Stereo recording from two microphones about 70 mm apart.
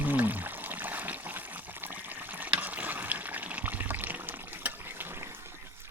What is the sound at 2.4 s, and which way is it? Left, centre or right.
Water, right.